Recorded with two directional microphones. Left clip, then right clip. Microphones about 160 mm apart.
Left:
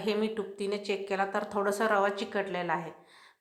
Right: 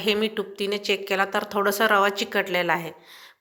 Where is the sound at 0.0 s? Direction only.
10° right (ahead or behind).